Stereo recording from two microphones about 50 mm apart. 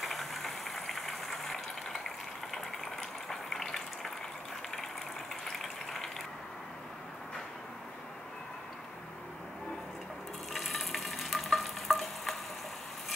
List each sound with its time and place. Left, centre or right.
0.0 s a sound: centre
2.5 s water: centre
10.5 s stir: centre